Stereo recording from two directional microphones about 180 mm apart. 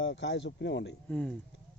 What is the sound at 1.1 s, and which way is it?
Speech, 10° left (ahead or behind).